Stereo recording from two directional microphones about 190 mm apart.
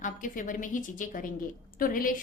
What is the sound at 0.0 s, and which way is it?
A woman's voice, 45° left (ahead or behind).